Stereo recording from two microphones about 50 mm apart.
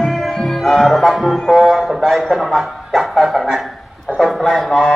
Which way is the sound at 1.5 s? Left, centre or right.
Centre.